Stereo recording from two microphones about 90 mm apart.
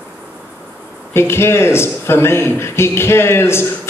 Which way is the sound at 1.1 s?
25° left (ahead or behind).